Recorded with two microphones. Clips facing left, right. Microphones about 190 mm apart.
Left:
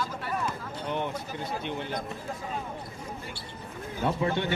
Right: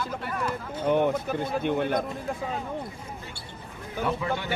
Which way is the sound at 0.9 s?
50° right (ahead or behind).